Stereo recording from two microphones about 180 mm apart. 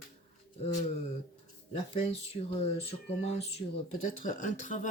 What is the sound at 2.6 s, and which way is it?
Speech, 35° left (ahead or behind).